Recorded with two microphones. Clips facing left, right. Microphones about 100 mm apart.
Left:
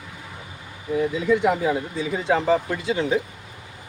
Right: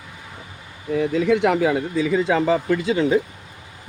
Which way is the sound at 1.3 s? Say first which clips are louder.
Right 1 dB; 85° right.